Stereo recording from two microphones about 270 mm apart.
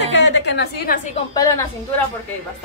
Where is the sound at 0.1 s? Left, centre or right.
Left.